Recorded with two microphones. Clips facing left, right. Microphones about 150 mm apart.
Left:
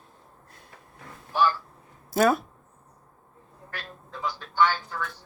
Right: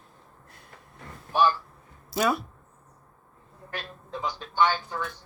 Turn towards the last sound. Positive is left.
turn(degrees=-20)  # may be behind; listen again after turning